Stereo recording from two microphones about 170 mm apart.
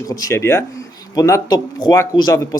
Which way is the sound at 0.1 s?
20° left (ahead or behind).